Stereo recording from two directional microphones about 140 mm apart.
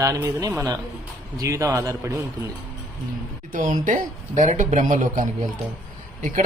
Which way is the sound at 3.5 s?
65° right (ahead or behind).